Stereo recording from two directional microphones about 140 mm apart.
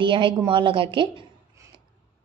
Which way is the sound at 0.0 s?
35° right (ahead or behind).